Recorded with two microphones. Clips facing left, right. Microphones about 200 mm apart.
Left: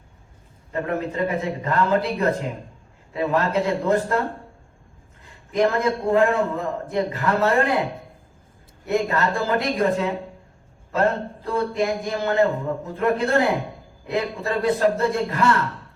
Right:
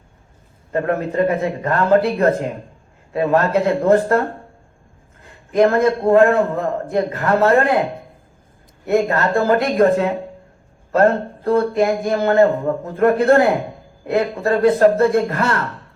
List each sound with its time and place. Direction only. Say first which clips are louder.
0.7 s a man's voice: right 5 dB; 55° right (ahead or behind)
5.2 s a man's voice: right 6 dB; 55° right (ahead or behind)
8.9 s speech: right 5 dB; 50° right (ahead or behind)